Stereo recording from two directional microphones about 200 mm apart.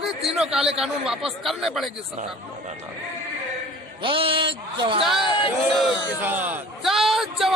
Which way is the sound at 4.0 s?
25° right (ahead or behind).